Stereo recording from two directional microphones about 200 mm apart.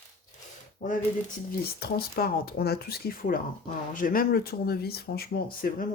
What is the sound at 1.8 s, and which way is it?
Speech, 50° left (ahead or behind).